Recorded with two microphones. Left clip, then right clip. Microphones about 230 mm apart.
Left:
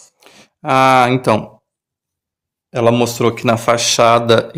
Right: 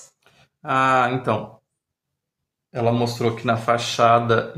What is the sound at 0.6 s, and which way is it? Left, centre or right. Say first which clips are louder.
Speech: left 7 dB; left.